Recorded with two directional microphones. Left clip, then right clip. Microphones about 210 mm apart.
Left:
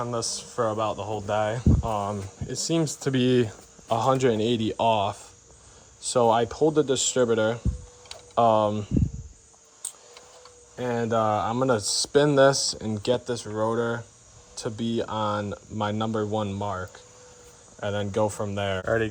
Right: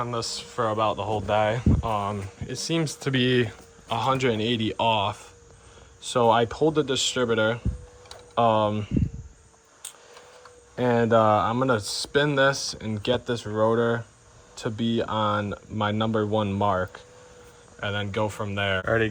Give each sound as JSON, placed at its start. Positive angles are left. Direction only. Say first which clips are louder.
{"t": 0.0, "sound": "speech", "louder": "even", "side_deg": 20}
{"t": 10.8, "sound": "speech", "louder": "right 5 dB", "side_deg": 0}
{"t": 17.7, "sound": "speech", "louder": "left 1 dB", "side_deg": 15}